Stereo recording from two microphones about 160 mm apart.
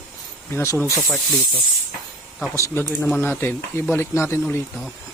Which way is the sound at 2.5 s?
15° left (ahead or behind).